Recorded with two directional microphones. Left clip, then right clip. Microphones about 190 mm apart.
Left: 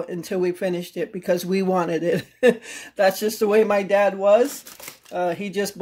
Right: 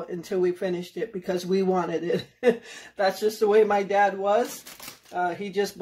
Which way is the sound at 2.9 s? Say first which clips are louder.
Left 4 dB; 50° left (ahead or behind).